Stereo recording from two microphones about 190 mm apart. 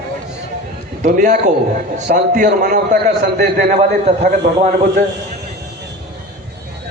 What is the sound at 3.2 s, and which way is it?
Speech, 55° right (ahead or behind).